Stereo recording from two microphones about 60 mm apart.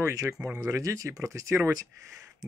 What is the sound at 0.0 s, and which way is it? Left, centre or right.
Speech, right.